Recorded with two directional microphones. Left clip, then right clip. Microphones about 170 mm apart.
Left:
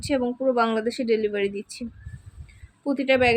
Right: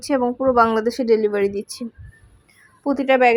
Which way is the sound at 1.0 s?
20° right (ahead or behind).